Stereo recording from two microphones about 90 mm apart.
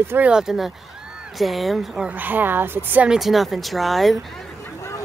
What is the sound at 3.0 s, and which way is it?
Speech, 5° right (ahead or behind).